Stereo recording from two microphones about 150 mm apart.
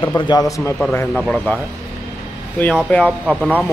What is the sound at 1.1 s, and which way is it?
Speech, centre (ahead or behind).